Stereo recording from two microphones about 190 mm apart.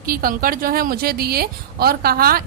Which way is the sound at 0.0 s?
50° right (ahead or behind).